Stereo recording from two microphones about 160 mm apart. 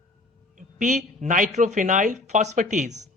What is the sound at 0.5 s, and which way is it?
A man's voice, 50° right (ahead or behind).